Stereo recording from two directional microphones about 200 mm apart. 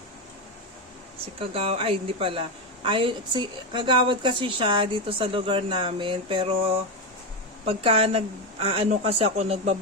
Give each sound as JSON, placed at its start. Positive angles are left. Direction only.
{"t": 1.4, "sound": "a woman's voice", "side_deg": -30}